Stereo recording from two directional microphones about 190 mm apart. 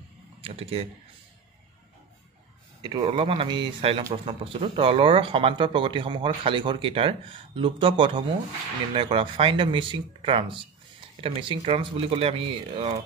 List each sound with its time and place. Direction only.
0.4 s speech: 30° right (ahead or behind)
2.8 s speech: 25° right (ahead or behind)